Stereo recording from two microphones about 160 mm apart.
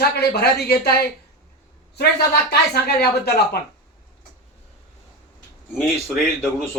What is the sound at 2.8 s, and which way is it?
Speech, 85° left.